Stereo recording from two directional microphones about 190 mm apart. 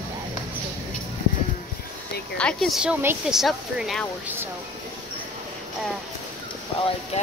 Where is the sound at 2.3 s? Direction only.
5° left (ahead or behind).